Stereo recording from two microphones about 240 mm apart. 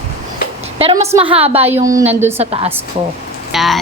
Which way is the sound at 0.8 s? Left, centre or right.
Right.